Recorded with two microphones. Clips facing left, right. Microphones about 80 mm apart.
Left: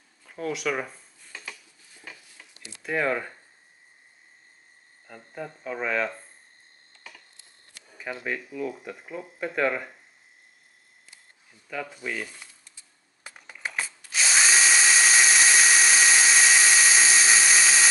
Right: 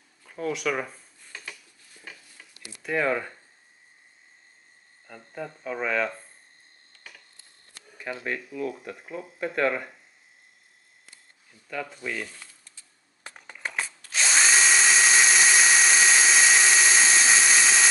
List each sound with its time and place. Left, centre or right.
0.2 s a sound: centre
2.8 s speech: centre
5.0 s speech: centre
8.0 s speech: centre
11.7 s speech: centre
12.4 s a sound: centre
13.3 s drill: centre